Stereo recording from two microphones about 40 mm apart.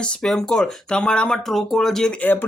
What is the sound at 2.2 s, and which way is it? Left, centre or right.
Speech, left.